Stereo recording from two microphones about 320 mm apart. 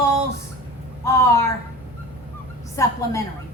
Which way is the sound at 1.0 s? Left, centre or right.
Centre.